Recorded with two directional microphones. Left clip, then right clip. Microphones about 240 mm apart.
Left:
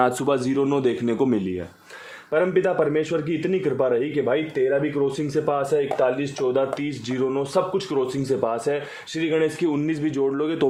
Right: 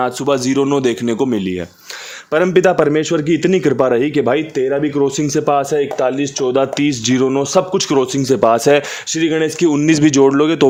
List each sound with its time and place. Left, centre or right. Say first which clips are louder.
0.0 s speech: right 5 dB; right
2.3 s a man's voice: right 8 dB; right